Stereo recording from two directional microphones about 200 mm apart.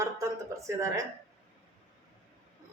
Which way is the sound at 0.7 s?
15° right (ahead or behind).